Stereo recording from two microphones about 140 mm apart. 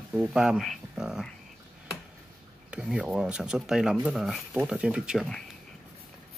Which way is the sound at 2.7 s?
5° right (ahead or behind).